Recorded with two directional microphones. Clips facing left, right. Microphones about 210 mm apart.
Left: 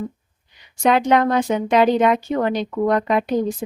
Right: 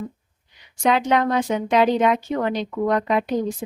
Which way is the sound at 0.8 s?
55° left (ahead or behind).